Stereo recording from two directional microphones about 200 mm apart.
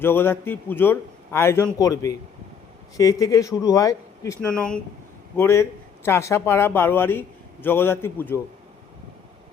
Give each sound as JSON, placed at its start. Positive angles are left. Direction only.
{"t": 0.0, "sound": "speech", "side_deg": 10}